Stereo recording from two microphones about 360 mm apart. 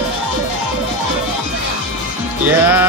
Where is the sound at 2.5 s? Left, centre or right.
Centre.